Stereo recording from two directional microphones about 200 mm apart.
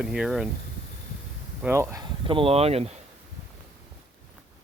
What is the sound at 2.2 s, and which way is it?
Speech, 25° right (ahead or behind).